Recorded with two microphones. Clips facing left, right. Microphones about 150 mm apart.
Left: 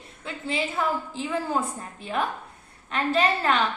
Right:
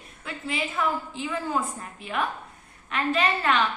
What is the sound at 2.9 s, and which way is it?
Speech, 35° left (ahead or behind).